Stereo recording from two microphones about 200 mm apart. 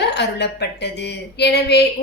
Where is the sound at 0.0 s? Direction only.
60° left (ahead or behind).